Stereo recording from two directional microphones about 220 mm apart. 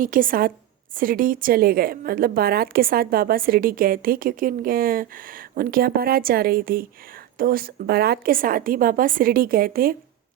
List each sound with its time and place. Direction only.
0.0 s a woman's voice: 40° right (ahead or behind)